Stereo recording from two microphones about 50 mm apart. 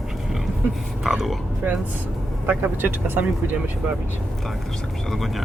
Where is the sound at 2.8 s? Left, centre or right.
Right.